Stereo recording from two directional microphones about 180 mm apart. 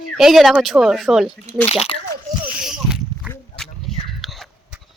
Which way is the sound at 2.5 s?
5° right (ahead or behind).